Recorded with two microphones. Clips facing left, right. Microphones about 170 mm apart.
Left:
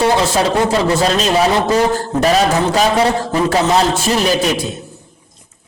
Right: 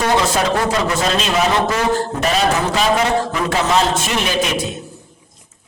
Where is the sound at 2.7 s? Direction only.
35° left (ahead or behind).